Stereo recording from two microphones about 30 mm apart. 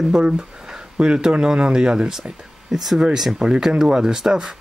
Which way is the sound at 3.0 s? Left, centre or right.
Centre.